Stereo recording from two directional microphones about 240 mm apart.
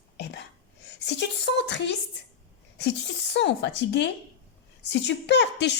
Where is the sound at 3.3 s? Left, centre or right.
Left.